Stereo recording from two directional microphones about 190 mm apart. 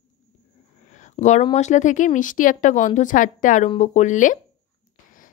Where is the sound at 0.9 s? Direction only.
40° left (ahead or behind).